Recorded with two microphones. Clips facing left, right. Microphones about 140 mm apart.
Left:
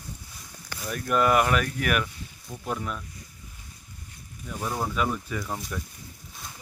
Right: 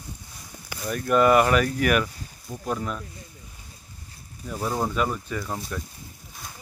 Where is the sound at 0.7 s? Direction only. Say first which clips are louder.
Right 4 dB; centre (ahead or behind).